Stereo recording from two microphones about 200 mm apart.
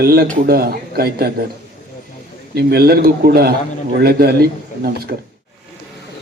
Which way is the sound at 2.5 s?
50° right (ahead or behind).